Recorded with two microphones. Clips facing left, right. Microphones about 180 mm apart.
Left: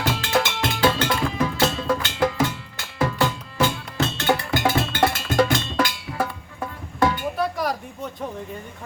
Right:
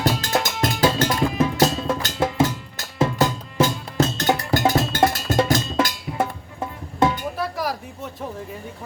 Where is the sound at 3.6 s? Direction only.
40° right (ahead or behind).